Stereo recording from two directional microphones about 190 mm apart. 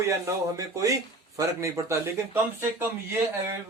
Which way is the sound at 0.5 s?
15° right (ahead or behind).